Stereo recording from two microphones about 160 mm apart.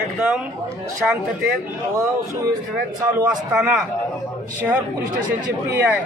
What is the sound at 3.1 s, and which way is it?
Speech, 10° right (ahead or behind).